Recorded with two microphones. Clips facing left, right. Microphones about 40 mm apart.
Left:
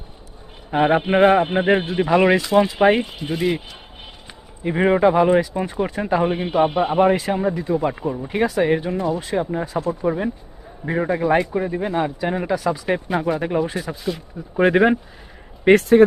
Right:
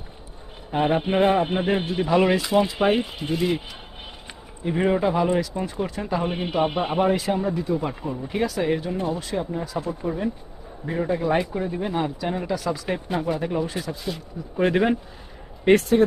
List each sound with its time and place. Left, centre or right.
0.7 s a man's voice: left
3.0 s speech: centre
4.6 s a man's voice: left
6.2 s speech: centre
7.1 s a man's voice: left
7.8 s speech: centre
8.3 s a man's voice: left
11.2 s speech: centre
11.8 s speech: centre
13.4 s a man's voice: left